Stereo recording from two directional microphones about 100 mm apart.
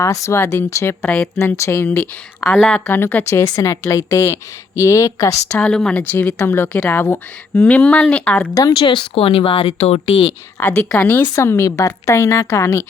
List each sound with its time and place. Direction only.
0.0 s a woman's voice: 30° left (ahead or behind)
3.4 s a woman's voice: 35° left (ahead or behind)
5.5 s speech: 10° left (ahead or behind)
6.1 s speech: 20° left (ahead or behind)
8.7 s a woman's voice: 55° left (ahead or behind)
10.6 s speech: 15° left (ahead or behind)
11.3 s a woman's voice: 30° left (ahead or behind)